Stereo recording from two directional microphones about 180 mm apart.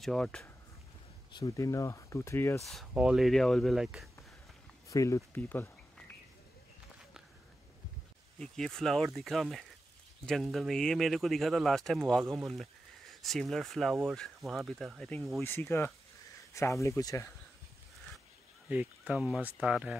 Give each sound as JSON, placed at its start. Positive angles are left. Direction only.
{"t": 0.0, "sound": "speech", "side_deg": 5}
{"t": 1.3, "sound": "speech", "side_deg": 20}
{"t": 2.6, "sound": "speech", "side_deg": 0}
{"t": 4.8, "sound": "speech", "side_deg": 15}
{"t": 8.4, "sound": "speech", "side_deg": 5}
{"t": 15.4, "sound": "speech", "side_deg": 15}
{"t": 18.7, "sound": "speech", "side_deg": -10}